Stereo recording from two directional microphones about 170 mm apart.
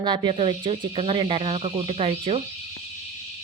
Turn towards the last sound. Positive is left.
turn(degrees=-35)  # may be behind; listen again after turning